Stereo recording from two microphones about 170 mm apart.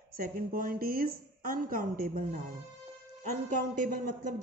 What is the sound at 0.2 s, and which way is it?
A woman's voice, 55° right (ahead or behind).